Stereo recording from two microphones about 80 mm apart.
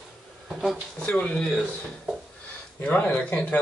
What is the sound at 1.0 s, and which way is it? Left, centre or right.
Speech, centre.